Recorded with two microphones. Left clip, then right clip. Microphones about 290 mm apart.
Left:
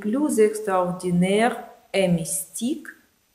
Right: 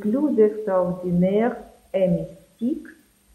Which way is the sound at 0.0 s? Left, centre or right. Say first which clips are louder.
Right 1 dB; left.